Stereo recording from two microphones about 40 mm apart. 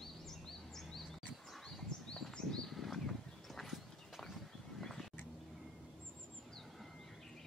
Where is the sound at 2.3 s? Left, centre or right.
Centre.